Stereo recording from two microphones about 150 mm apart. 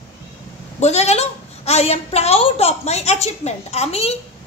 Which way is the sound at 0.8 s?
45° left (ahead or behind).